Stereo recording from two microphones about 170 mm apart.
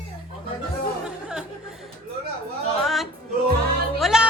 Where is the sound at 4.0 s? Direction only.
5° right (ahead or behind).